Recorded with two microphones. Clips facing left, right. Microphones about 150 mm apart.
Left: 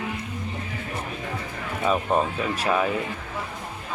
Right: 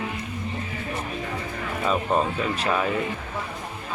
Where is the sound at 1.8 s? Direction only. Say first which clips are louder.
Left 1 dB; 5° left (ahead or behind).